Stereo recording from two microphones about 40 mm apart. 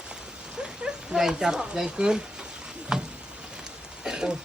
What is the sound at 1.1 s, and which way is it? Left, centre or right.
Speech, centre.